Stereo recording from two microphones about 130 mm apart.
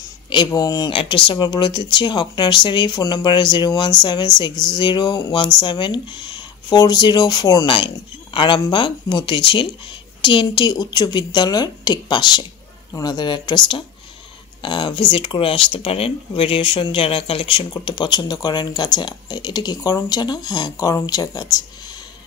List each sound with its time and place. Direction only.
0.5 s speech: 30° left (ahead or behind)
7.7 s speech: 40° left (ahead or behind)